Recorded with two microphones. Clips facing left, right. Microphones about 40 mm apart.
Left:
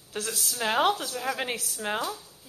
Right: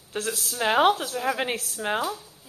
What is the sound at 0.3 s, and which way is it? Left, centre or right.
Speech, centre.